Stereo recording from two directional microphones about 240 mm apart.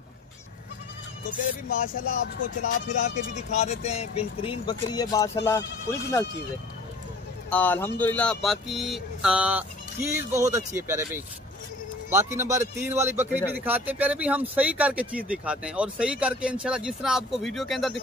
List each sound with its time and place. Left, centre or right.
1.7 s speech: left; by 6.2 s centre
7.4 s speech: centre